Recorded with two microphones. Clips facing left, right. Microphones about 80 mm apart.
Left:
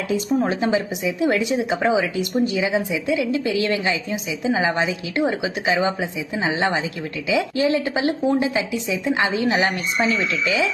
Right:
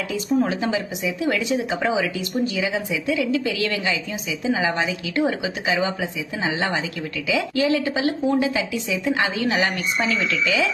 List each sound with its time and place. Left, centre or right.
0.1 s speech: left